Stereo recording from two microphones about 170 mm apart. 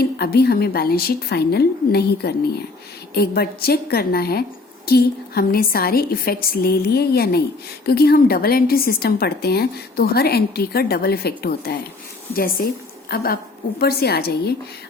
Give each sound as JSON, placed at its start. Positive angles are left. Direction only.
{"t": 0.0, "sound": "a woman's voice", "side_deg": 70}